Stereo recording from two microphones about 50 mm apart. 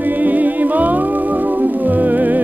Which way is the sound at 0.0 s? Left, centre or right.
Right.